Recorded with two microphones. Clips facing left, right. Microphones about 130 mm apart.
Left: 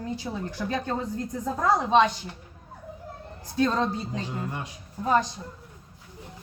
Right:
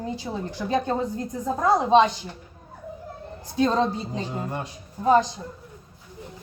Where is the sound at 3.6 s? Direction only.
25° right (ahead or behind).